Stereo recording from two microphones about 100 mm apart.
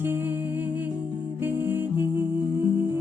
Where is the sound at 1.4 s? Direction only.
20° right (ahead or behind).